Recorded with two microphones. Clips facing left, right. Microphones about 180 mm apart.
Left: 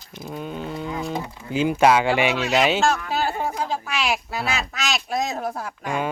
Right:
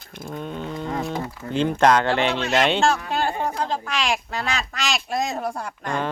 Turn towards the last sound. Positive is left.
turn(degrees=5)  # may be behind; listen again after turning